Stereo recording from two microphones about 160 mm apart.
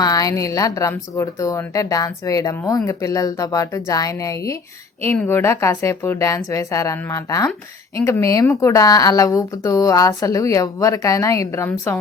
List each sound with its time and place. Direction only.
0.0 s a woman's voice: 20° left (ahead or behind)